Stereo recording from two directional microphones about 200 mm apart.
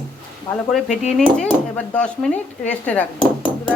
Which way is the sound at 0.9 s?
35° left (ahead or behind).